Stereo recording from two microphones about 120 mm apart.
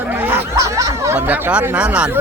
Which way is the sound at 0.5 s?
25° right (ahead or behind).